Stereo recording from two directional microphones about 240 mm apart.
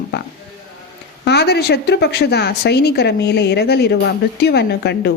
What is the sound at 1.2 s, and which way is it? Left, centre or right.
Speech, left.